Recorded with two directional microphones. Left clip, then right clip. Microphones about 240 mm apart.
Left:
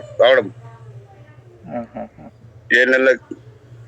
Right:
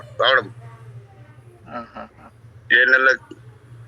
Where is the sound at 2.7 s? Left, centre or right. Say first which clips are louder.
Left 1 dB; centre.